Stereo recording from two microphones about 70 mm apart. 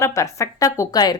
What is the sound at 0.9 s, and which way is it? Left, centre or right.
Speech, left.